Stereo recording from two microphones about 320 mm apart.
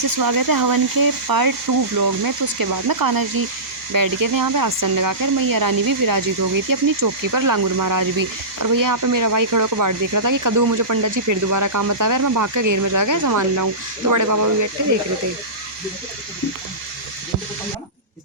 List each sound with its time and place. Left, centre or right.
0.2 s speech: right